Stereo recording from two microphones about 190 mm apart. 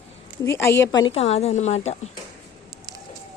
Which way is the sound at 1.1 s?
35° left (ahead or behind).